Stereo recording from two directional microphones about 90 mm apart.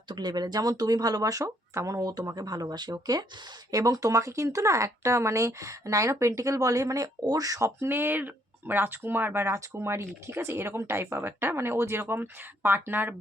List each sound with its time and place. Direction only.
0.1 s speech: 55° right (ahead or behind); by 13.1 s 20° right (ahead or behind)